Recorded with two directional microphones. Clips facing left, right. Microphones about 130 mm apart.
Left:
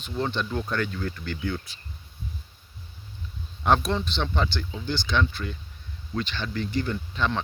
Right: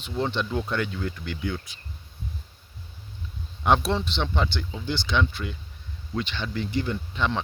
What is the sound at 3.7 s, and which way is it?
Speech, 25° right (ahead or behind).